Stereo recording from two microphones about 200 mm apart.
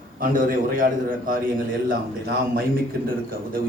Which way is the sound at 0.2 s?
45° right (ahead or behind).